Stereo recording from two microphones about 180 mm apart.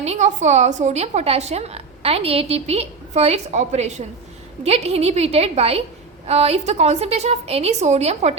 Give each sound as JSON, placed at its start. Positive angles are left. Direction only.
{"t": 0.0, "sound": "a woman's voice", "side_deg": -40}